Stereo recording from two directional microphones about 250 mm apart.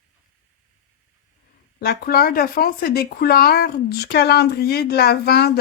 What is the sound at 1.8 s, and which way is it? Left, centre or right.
Speech, left.